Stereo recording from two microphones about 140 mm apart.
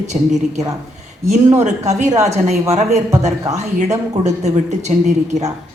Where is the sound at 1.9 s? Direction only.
55° right (ahead or behind).